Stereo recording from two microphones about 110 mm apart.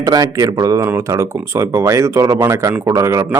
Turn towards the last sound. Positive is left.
turn(degrees=-30)  # may be behind; listen again after turning